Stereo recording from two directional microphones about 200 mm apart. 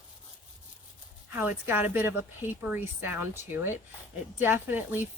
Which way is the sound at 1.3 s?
10° right (ahead or behind).